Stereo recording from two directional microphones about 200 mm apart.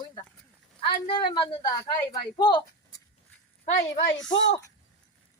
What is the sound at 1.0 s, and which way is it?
Speech, 25° left (ahead or behind).